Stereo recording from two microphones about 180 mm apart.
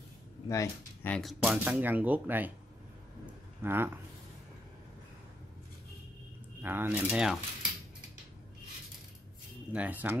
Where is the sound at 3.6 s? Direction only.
10° right (ahead or behind).